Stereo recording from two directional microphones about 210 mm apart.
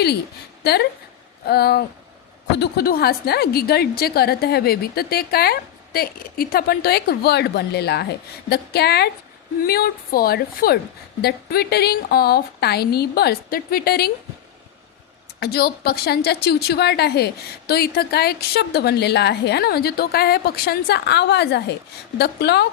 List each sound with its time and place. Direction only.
0.6 s a woman's voice: 50° left (ahead or behind)
15.4 s a woman's voice: 50° left (ahead or behind)